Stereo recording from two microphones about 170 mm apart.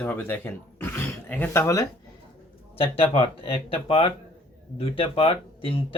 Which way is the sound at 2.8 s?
35° left (ahead or behind).